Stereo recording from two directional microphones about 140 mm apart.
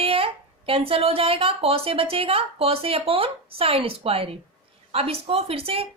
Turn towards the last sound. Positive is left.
turn(degrees=-45)  # may be behind; listen again after turning